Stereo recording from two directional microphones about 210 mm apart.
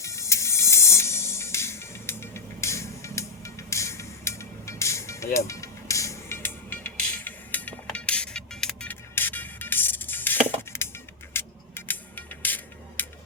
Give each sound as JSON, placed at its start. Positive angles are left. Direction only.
{"t": 0.0, "sound": "music", "side_deg": 15}